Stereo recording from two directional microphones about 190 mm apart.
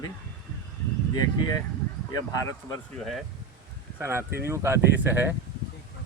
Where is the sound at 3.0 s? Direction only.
Centre (ahead or behind).